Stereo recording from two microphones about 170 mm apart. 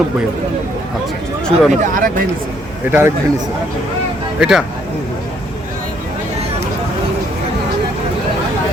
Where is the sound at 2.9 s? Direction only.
15° right (ahead or behind).